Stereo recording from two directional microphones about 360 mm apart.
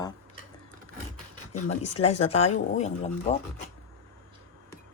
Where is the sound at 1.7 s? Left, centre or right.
Centre.